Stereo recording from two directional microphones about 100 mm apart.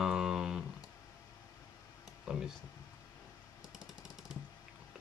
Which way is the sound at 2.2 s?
5° right (ahead or behind).